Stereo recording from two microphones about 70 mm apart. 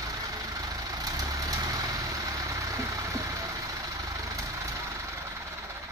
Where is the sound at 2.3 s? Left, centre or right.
Right.